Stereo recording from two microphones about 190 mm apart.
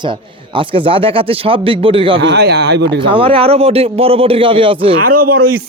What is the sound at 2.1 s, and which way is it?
Speech, 65° right (ahead or behind).